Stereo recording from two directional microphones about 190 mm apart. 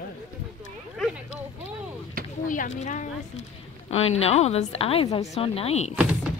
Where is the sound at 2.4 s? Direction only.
40° left (ahead or behind).